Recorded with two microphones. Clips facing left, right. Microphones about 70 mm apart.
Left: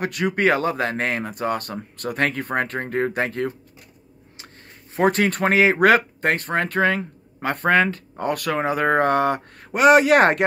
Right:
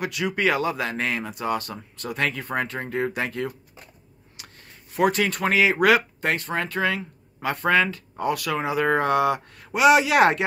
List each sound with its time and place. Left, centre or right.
0.0 s speech: left
4.4 s a sound: left
4.9 s speech: left